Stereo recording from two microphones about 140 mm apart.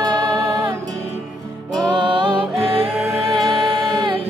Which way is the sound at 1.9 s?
35° right (ahead or behind).